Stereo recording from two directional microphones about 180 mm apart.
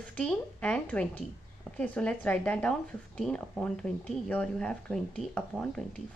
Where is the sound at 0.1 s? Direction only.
5° left (ahead or behind).